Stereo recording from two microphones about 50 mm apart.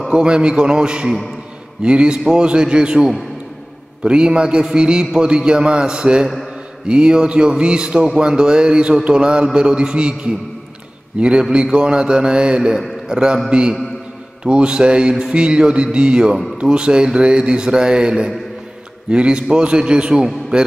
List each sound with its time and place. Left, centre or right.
0.1 s a man's voice: centre
6.2 s a man's voice: centre
6.9 s mantra: centre
8.2 s a man's voice: centre
11.1 s mantra: right
11.5 s a man's voice: centre
14.4 s mantra: centre
16.5 s a man's voice: centre
19.0 s mantra: centre
19.5 s a man's voice: centre